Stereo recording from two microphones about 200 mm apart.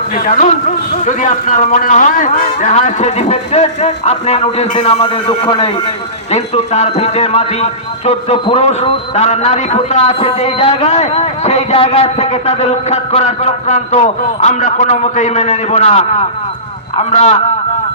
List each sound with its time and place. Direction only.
0.3 s speech: 40° left (ahead or behind)